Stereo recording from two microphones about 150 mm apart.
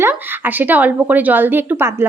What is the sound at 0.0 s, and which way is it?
Speech, 15° right (ahead or behind).